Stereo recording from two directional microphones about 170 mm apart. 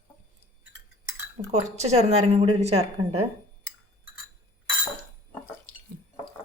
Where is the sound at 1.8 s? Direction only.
40° right (ahead or behind).